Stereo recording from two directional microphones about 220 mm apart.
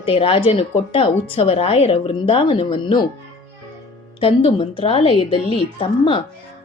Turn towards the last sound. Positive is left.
turn(degrees=20)  # may be behind; listen again after turning